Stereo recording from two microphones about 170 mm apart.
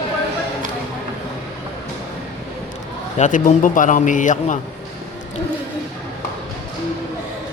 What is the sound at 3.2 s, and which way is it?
A man's voice, 50° left (ahead or behind).